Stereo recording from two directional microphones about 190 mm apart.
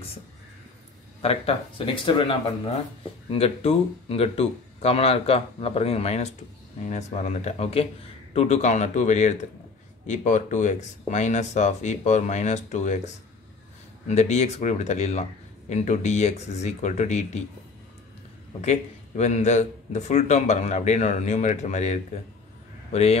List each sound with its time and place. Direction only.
1.2 s speech: 30° left (ahead or behind)
18.6 s speech: 35° left (ahead or behind)